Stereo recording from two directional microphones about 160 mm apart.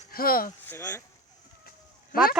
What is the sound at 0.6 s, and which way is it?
Speech, 10° left (ahead or behind).